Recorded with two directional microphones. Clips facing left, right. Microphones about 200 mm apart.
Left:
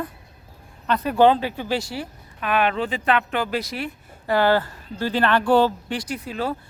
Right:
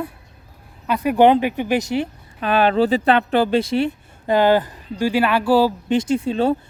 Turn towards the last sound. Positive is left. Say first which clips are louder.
# right 9 dB
turn(degrees=-25)  # may be behind; listen again after turning